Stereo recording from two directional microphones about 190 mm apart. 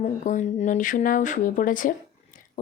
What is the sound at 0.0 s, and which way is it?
Speech, 40° left (ahead or behind).